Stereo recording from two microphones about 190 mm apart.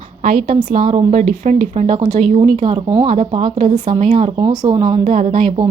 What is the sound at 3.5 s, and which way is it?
Speech, 40° right (ahead or behind).